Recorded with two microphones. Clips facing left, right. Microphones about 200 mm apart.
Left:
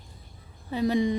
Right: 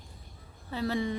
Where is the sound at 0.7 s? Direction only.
15° left (ahead or behind).